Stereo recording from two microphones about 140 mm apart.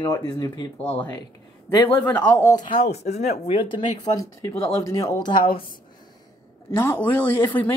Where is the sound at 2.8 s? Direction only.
50° left (ahead or behind).